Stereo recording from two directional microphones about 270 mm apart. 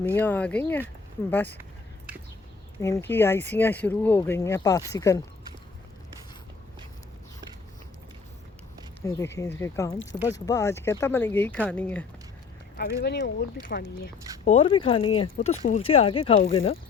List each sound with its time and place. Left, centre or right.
0.1 s speech: centre
2.8 s speech: centre
9.0 s speech: centre
12.7 s speech: left
14.4 s speech: left